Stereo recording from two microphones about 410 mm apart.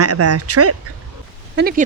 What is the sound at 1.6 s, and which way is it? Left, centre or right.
Speech, right.